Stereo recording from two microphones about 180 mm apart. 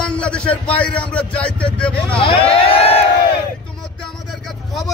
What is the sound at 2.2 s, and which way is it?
Speech, 30° left (ahead or behind).